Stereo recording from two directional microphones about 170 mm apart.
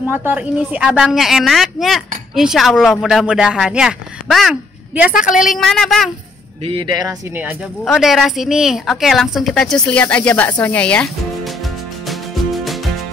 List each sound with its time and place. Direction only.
0.1 s speech: 10° right (ahead or behind)
6.6 s speech: 30° right (ahead or behind)
7.8 s speech: centre (ahead or behind)